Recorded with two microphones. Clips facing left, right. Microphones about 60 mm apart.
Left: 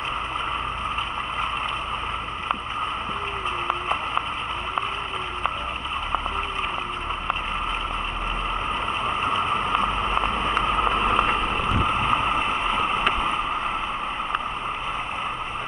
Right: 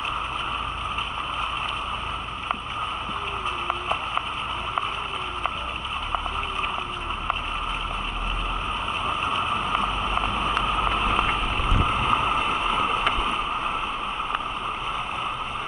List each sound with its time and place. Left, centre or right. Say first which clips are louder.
9.0 s vehicle: left 1 dB; centre
11.1 s boat: left 2 dB; centre
13.1 s boat: left 1 dB; left